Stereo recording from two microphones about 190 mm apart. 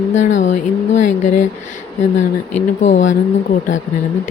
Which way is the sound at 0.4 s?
40° left (ahead or behind).